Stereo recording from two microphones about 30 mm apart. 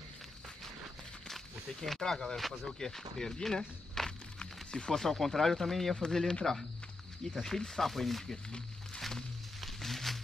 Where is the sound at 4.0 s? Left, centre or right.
Centre.